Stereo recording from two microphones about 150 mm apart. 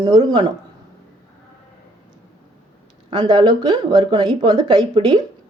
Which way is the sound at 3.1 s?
30° right (ahead or behind).